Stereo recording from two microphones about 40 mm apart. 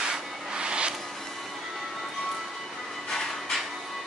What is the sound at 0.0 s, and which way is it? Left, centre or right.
Rub, centre.